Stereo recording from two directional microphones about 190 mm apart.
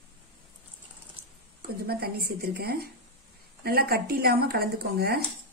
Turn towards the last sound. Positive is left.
turn(degrees=-55)  # may be behind; listen again after turning